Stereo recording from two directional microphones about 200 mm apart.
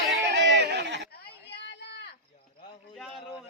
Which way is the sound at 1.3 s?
55° left (ahead or behind).